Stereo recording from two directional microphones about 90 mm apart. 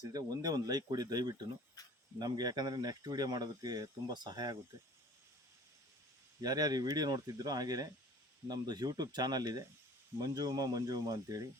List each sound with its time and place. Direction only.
0.0 s speech: 45° right (ahead or behind)
6.4 s speech: 45° right (ahead or behind)